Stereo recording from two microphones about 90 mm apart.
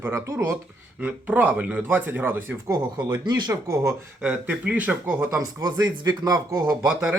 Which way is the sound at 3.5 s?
35° right (ahead or behind).